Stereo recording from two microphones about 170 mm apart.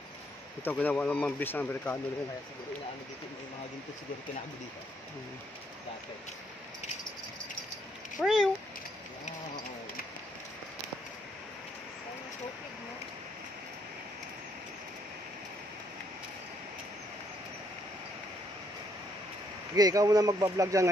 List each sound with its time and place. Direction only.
0.7 s speech: 10° left (ahead or behind)
8.2 s speech: centre (ahead or behind)
19.7 s speech: 20° right (ahead or behind)